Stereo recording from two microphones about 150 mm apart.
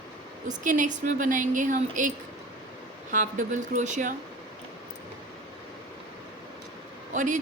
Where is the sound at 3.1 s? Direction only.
55° right (ahead or behind).